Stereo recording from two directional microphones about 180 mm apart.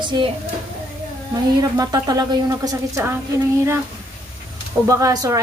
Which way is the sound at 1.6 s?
20° right (ahead or behind).